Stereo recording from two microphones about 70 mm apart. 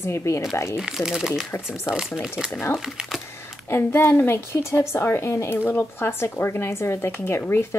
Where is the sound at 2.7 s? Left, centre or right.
Centre.